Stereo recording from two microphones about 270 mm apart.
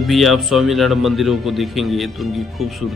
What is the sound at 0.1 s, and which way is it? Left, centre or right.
A man's voice, centre.